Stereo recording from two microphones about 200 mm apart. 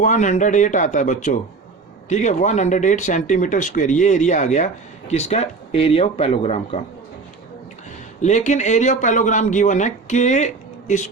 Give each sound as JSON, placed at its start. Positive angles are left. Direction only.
{"t": 0.0, "sound": "speech", "side_deg": 40}
{"t": 8.2, "sound": "speech", "side_deg": 35}